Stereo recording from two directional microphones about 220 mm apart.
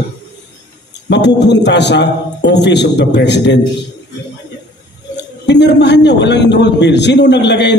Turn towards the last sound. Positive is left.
turn(degrees=50)  # may be behind; listen again after turning